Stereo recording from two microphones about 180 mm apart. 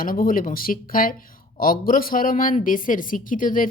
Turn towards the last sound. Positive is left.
turn(degrees=50)  # may be behind; listen again after turning